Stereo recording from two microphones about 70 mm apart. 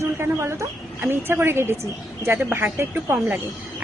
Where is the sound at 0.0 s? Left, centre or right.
Right.